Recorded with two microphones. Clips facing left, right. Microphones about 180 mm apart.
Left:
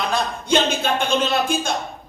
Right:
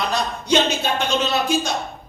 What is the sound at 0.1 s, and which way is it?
Speech, 50° left (ahead or behind).